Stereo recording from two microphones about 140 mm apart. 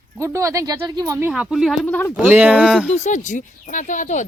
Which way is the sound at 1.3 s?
5° right (ahead or behind).